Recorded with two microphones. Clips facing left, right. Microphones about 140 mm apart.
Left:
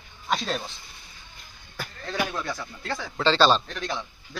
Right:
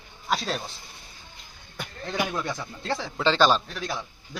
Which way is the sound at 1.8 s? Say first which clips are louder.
Even; 15° right (ahead or behind).